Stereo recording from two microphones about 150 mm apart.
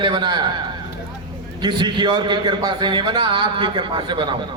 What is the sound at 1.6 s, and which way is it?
A man's voice, 30° right (ahead or behind).